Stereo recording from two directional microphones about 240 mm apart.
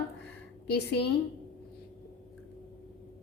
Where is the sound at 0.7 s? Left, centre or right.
Left.